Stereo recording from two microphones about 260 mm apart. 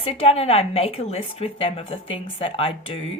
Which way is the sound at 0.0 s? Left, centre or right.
Left.